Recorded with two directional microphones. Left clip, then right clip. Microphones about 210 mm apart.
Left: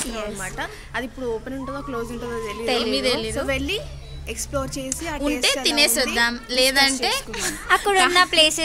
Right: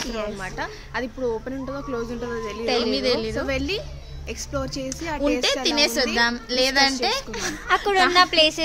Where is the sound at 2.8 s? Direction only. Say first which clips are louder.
Even; 20° right (ahead or behind).